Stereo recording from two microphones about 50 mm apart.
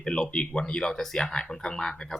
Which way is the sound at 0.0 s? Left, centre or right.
Centre.